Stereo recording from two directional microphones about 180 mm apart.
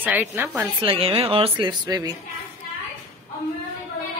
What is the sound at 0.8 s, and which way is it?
Speech, 30° right (ahead or behind).